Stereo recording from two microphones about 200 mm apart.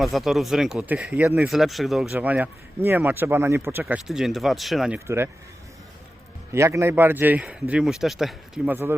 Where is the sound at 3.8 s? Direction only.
Centre (ahead or behind).